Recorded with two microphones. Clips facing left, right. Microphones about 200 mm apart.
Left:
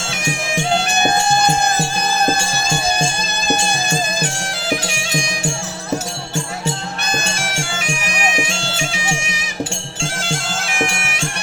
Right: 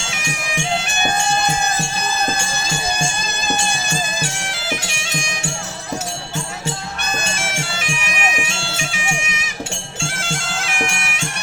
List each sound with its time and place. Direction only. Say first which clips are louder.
0.5 s music: left 4 dB; 35° left (ahead or behind)
7.1 s music: left 2 dB; 35° left (ahead or behind)
8.2 s bagpipes: left 4 dB; 35° left (ahead or behind)